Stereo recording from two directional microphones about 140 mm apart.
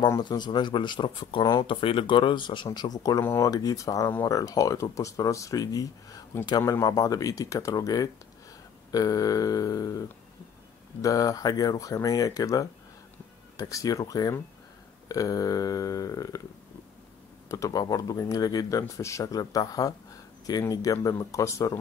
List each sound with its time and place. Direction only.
0.2 s speech: 30° left (ahead or behind)
17.5 s speech: 25° left (ahead or behind)